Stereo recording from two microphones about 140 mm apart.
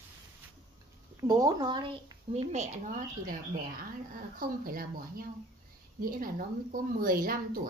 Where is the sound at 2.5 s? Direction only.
55° right (ahead or behind).